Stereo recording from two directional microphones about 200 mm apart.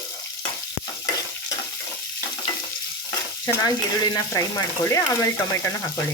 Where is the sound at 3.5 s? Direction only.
20° left (ahead or behind).